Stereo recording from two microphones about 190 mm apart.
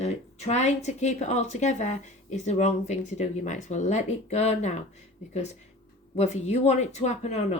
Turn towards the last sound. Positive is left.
turn(degrees=35)  # may be behind; listen again after turning